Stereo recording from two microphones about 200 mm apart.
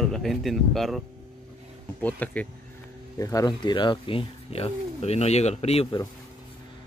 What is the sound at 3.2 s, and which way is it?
Speech, 20° left (ahead or behind).